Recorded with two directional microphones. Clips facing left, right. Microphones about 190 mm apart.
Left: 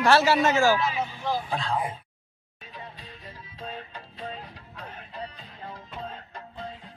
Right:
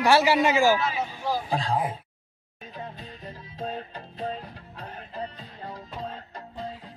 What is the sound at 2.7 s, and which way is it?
Music, 45° right (ahead or behind).